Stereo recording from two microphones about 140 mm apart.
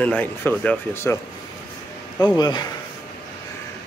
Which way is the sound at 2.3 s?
30° left (ahead or behind).